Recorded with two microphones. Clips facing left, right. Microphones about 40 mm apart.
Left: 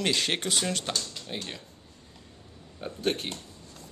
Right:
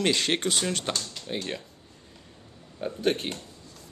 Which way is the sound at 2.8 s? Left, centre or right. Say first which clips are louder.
Right 3 dB; centre.